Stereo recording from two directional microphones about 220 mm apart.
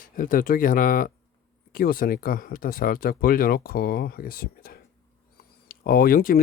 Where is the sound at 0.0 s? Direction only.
40° left (ahead or behind).